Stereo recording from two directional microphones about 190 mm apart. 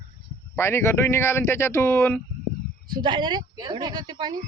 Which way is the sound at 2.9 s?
25° right (ahead or behind).